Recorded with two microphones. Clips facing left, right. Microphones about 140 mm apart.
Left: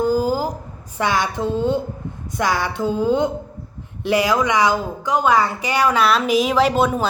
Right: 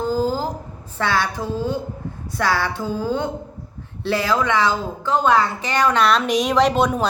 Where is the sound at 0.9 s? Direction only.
15° left (ahead or behind).